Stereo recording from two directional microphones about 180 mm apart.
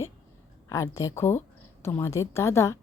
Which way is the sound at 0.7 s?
15° left (ahead or behind).